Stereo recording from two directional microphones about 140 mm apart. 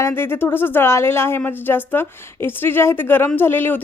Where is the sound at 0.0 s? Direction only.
15° left (ahead or behind).